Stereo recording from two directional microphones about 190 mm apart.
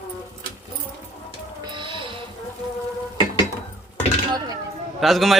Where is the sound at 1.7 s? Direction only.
25° right (ahead or behind).